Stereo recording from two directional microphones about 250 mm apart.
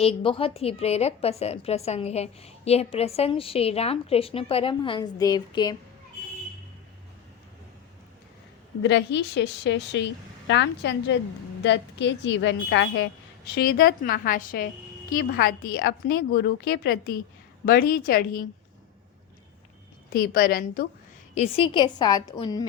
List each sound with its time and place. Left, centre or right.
0.0 s a woman's voice: left
8.8 s a woman's voice: left
20.1 s a woman's voice: left
21.3 s a woman's voice: left